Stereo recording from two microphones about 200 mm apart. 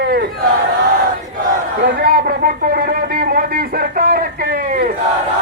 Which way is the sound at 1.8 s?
50° right (ahead or behind).